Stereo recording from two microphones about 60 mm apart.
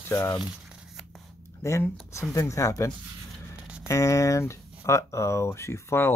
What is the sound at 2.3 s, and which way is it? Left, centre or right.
Speech, left.